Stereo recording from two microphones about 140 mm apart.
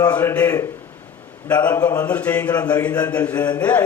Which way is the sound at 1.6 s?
10° left (ahead or behind).